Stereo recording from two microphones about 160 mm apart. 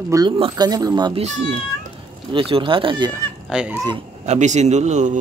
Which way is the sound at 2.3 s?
30° right (ahead or behind).